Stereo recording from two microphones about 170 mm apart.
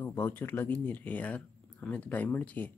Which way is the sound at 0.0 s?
10° left (ahead or behind).